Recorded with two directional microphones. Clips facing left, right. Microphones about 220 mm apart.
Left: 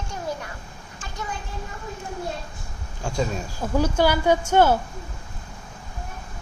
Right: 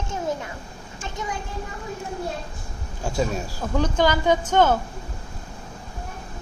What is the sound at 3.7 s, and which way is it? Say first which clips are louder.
Speech: left 1 dB; 10° left (ahead or behind).